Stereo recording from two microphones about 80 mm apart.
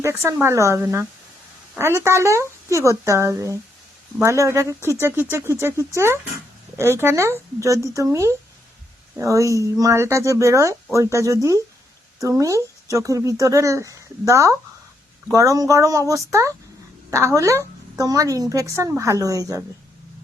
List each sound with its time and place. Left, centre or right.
0.0 s a woman's voice: right